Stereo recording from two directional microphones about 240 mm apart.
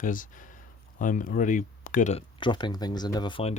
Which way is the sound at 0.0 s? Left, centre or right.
Left.